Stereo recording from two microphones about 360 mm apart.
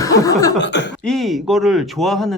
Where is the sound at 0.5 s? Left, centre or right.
Left.